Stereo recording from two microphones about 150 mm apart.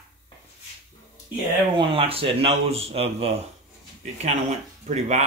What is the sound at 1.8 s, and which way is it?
A man's voice, 40° right (ahead or behind).